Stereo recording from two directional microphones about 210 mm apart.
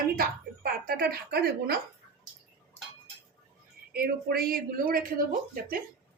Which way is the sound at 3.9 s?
45° right (ahead or behind).